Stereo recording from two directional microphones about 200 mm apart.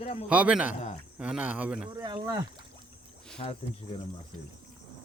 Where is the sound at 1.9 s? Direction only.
20° right (ahead or behind).